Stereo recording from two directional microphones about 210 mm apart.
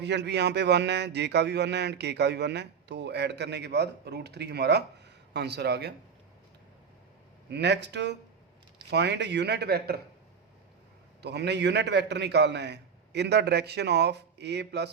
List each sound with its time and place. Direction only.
0.0 s speech: 55° right (ahead or behind)
7.5 s speech: 55° right (ahead or behind)
11.2 s speech: 55° right (ahead or behind)